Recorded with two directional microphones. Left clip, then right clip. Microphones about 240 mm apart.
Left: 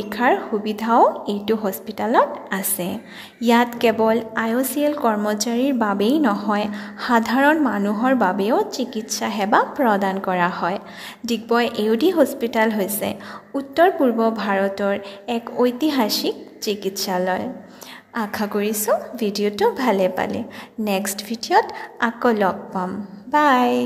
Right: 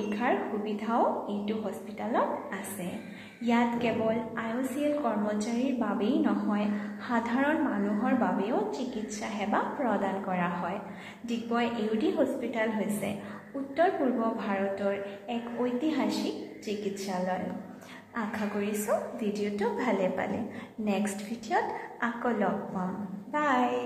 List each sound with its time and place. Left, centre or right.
0.1 s a woman's voice: left